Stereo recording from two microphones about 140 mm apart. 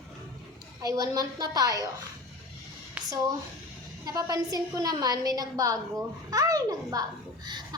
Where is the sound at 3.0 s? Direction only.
5° right (ahead or behind).